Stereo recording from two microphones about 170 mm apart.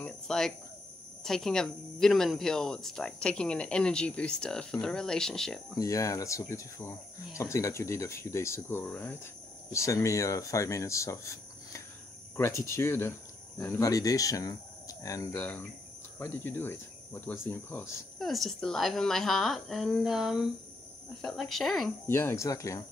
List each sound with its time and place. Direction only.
0.0 s cricket: 5° left (ahead or behind)
1.2 s speech: 5° left (ahead or behind)
5.8 s speech: 20° left (ahead or behind)
18.2 s speech: centre (ahead or behind)
22.0 s speech: 15° left (ahead or behind)